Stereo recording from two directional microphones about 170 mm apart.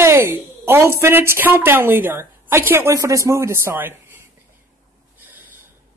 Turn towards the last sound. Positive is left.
turn(degrees=-10)  # may be behind; listen again after turning